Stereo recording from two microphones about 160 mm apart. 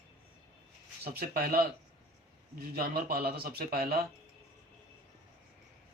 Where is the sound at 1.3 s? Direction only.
70° right (ahead or behind).